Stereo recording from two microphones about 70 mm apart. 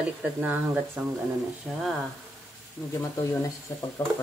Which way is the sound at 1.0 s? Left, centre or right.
Right.